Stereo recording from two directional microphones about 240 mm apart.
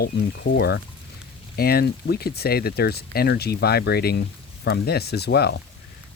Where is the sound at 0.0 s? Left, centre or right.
Left.